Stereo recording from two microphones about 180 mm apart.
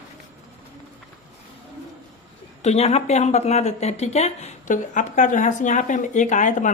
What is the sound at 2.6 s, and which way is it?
Speech, 35° left (ahead or behind).